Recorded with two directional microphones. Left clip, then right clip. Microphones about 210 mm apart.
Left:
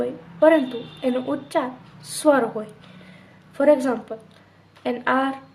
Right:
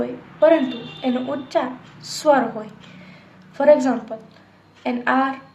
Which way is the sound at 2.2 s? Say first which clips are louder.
Right 2 dB; 30° left (ahead or behind).